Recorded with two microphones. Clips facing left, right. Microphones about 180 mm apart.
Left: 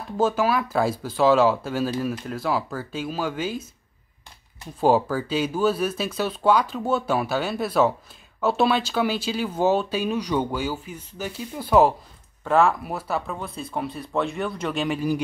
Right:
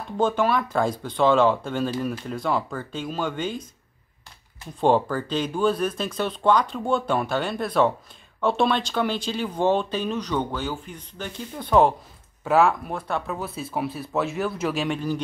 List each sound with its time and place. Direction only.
0.2 s speech: 5° left (ahead or behind)
4.7 s speech: 5° left (ahead or behind)